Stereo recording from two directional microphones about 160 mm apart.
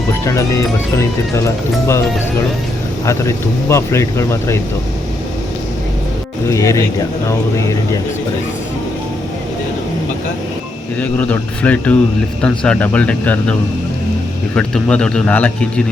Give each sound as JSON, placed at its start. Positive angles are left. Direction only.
{"t": 0.1, "sound": "speech", "side_deg": 20}
{"t": 3.1, "sound": "speech", "side_deg": 15}
{"t": 6.5, "sound": "speech", "side_deg": 20}
{"t": 11.0, "sound": "speech", "side_deg": 10}